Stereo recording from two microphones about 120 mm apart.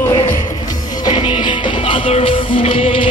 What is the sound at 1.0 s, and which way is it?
Music, 45° left (ahead or behind).